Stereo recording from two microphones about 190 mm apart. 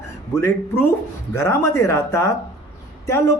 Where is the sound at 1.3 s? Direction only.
15° left (ahead or behind).